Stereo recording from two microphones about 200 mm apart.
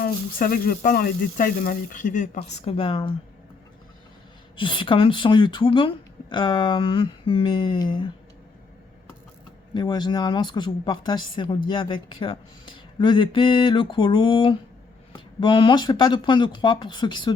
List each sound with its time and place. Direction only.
0.0 s speech: 45° left (ahead or behind); by 3.2 s 25° left (ahead or behind)
4.5 s speech: 25° left (ahead or behind)
9.7 s speech: 20° left (ahead or behind)